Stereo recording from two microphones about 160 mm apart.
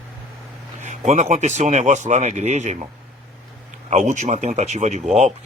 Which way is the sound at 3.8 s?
50° right (ahead or behind).